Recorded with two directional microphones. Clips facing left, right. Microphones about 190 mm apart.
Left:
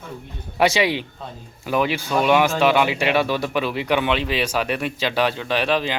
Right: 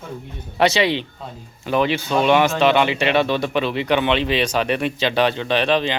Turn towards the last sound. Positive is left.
turn(degrees=5)  # may be behind; listen again after turning